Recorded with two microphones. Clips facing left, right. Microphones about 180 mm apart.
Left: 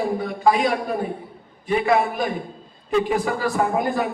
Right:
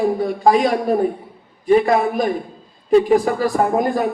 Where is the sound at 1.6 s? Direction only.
40° right (ahead or behind).